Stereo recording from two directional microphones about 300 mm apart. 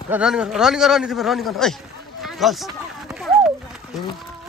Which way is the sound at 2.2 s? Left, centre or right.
Centre.